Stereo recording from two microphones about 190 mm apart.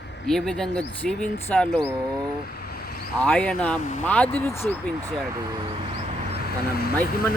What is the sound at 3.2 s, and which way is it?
Speech, 5° left (ahead or behind).